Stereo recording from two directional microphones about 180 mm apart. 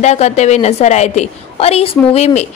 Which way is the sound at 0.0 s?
40° left (ahead or behind).